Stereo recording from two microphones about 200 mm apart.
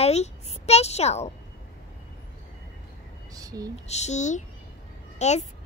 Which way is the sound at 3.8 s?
35° left (ahead or behind).